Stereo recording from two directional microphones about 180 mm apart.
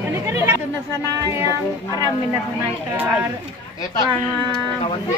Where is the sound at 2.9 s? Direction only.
10° right (ahead or behind).